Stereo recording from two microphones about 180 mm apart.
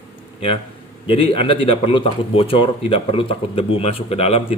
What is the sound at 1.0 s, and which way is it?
Speech, 30° left (ahead or behind).